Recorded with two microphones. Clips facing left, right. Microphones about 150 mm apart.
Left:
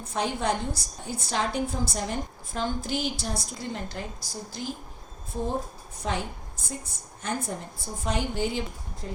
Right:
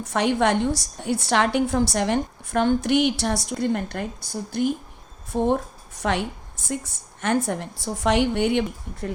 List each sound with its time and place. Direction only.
0.1 s a woman's voice: 75° right (ahead or behind)